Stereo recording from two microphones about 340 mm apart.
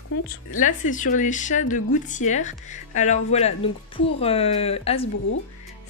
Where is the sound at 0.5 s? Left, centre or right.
Left.